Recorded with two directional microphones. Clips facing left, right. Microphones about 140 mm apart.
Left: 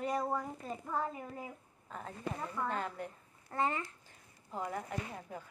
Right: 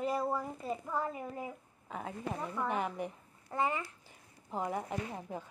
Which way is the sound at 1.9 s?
5° right (ahead or behind).